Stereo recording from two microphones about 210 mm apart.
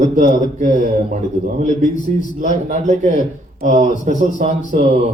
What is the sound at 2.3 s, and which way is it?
Speech, 35° right (ahead or behind).